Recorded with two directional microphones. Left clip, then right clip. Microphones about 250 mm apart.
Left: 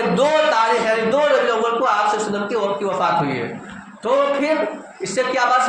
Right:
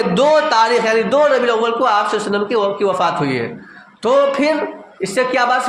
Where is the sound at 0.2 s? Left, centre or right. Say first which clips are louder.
Right 4 dB; right.